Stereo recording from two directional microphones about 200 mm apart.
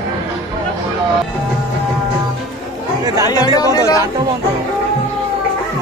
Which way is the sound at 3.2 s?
20° left (ahead or behind).